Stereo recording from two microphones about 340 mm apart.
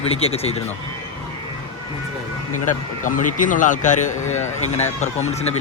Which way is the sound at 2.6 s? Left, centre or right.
Left.